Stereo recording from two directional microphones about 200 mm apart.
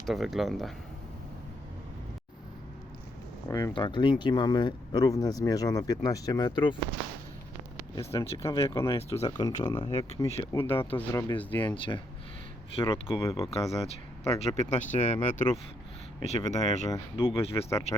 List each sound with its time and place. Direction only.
0.0 s speech: centre (ahead or behind)
3.8 s speech: 20° left (ahead or behind)
7.9 s speech: 15° left (ahead or behind)
11.8 s speech: 25° left (ahead or behind)
13.1 s speech: 15° left (ahead or behind)
13.5 s speech: 30° left (ahead or behind); by 17.8 s 15° left (ahead or behind)